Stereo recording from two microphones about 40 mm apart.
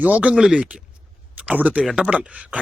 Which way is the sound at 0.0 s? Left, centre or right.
Right.